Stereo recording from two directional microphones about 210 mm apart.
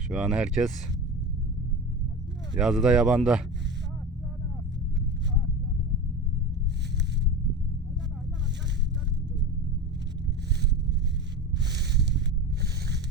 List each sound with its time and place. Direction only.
0.1 s speech: 5° right (ahead or behind)
2.6 s speech: centre (ahead or behind)
11.5 s a sound: 55° right (ahead or behind)